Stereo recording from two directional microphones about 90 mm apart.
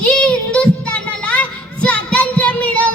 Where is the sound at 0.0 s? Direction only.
10° left (ahead or behind).